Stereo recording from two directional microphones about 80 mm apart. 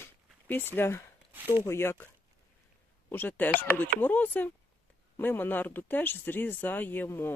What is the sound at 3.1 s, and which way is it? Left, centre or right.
Speech, left.